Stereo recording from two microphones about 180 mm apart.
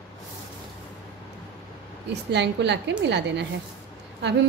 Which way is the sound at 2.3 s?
75° right (ahead or behind).